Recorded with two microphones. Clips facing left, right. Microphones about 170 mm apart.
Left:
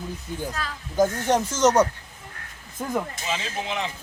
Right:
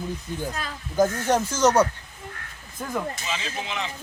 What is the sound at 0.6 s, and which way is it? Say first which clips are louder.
Speech: left 1 dB; 20° right (ahead or behind).